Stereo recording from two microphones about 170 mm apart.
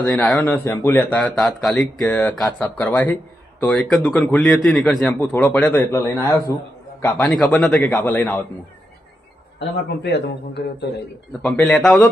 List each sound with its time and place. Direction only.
0.0 s a man's voice: 5° left (ahead or behind)
7.2 s speech: centre (ahead or behind)
9.6 s a man's voice: 80° left
11.4 s a man's voice: centre (ahead or behind)